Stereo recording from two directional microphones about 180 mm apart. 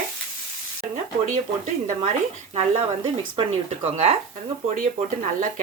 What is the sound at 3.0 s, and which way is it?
Speech, 30° right (ahead or behind).